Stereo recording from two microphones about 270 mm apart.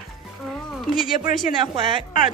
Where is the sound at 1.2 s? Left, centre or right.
Left.